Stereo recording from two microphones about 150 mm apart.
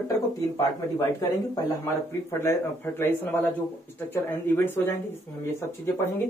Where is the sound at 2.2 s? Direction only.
15° left (ahead or behind).